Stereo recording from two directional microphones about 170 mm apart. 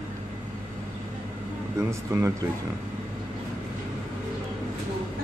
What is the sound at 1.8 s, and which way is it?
Speech, 15° right (ahead or behind).